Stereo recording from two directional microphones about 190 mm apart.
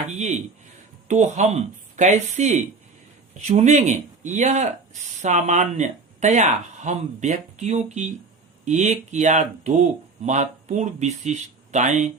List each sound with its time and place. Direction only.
0.0 s a man's voice: 35° right (ahead or behind)